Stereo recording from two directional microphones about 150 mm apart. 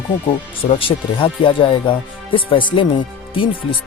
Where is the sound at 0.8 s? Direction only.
35° left (ahead or behind).